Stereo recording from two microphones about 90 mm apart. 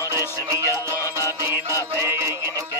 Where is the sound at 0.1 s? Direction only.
35° right (ahead or behind).